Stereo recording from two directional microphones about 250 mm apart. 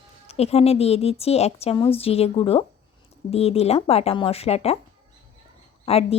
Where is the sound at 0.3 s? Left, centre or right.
Left.